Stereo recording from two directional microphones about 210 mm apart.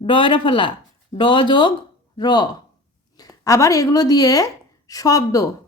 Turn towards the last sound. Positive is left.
turn(degrees=15)  # may be behind; listen again after turning